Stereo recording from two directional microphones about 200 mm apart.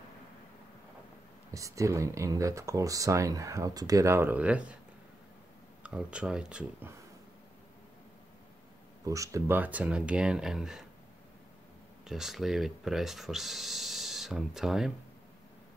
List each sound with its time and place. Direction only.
1.5 s speech: 15° right (ahead or behind)
5.8 s speech: 5° right (ahead or behind)
9.0 s speech: 15° right (ahead or behind)
12.1 s speech: centre (ahead or behind)